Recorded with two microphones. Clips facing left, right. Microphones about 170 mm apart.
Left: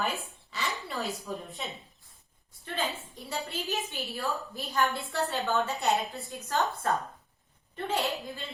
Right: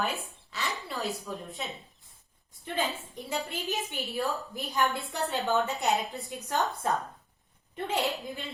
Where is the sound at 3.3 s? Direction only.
15° right (ahead or behind).